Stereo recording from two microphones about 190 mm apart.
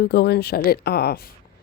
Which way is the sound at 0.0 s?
55° left (ahead or behind).